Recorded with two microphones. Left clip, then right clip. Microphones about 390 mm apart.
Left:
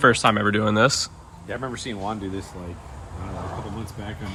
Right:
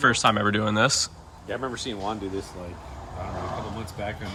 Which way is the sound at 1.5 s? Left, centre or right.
Centre.